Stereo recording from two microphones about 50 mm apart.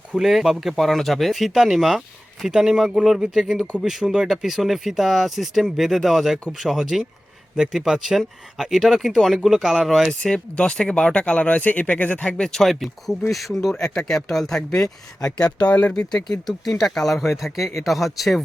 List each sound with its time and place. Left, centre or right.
0.1 s speech: centre
10.1 s speech: centre; by 12.2 s left
12.2 s speech: left
12.5 s speech: centre
15.6 s speech: left
16.3 s speech: centre